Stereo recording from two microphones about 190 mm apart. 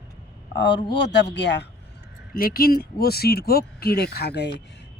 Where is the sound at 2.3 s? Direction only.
50° left (ahead or behind).